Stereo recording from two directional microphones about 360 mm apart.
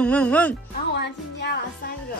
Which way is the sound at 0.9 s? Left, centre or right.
Left.